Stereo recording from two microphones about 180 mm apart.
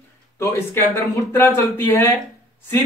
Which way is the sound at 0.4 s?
15° left (ahead or behind).